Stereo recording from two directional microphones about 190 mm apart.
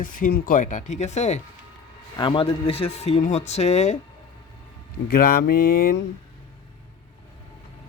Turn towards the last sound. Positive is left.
turn(degrees=55)  # may be behind; listen again after turning